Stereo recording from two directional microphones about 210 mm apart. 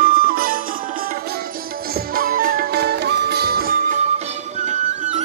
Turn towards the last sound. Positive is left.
turn(degrees=-35)  # may be behind; listen again after turning